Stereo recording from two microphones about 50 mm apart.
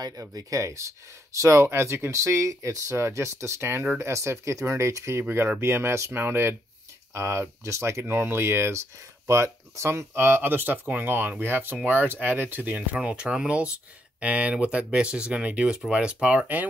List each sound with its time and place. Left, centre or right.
0.2 s speech: right
4.0 s speech: right
5.6 s speech: right
6.1 s speech: right
7.2 s speech: right
8.0 s speech: right
10.5 s speech: right
12.7 s speech: right